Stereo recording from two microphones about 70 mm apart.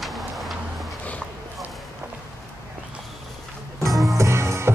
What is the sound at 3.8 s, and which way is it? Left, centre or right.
Music, centre.